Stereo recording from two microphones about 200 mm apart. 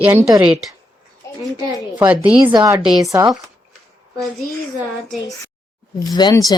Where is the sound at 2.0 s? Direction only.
5° right (ahead or behind).